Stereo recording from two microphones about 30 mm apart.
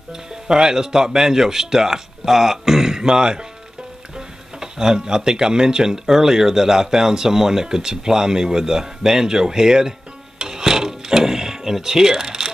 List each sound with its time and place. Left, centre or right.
0.1 s speech: right
4.6 s speech: right
10.4 s music: right